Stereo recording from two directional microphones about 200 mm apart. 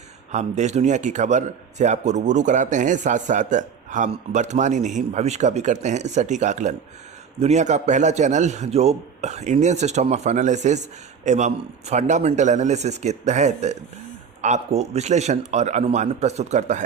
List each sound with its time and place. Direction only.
0.3 s a man's voice: 35° right (ahead or behind)